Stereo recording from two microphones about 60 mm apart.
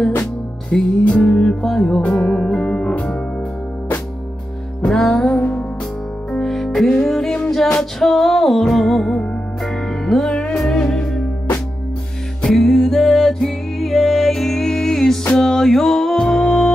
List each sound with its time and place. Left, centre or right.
0.7 s music: centre
4.8 s music: centre
5.2 s music: left
6.3 s music: centre
12.4 s music: centre